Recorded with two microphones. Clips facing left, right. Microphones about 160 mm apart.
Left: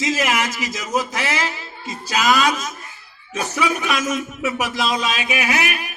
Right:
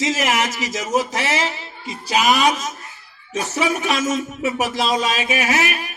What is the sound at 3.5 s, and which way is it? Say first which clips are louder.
A man's voice: right 1 dB; 30° right (ahead or behind).